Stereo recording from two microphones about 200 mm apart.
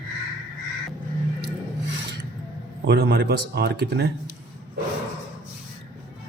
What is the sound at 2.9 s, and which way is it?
A man's voice, 55° right (ahead or behind).